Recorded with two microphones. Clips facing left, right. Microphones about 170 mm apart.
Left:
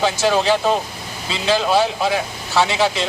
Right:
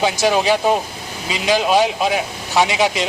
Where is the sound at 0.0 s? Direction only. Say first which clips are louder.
Right 1 dB; 15° right (ahead or behind).